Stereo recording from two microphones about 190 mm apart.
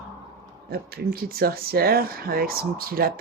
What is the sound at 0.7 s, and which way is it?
Speech, 55° right (ahead or behind).